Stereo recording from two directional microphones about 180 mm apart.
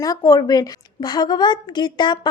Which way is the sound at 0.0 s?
20° left (ahead or behind).